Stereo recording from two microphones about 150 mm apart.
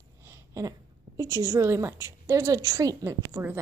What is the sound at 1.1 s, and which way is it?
A woman's voice, 20° right (ahead or behind).